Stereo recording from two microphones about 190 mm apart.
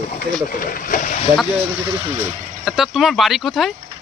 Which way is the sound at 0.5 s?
45° left (ahead or behind).